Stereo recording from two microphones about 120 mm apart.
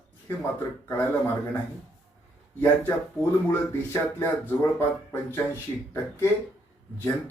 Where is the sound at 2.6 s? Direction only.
20° left (ahead or behind).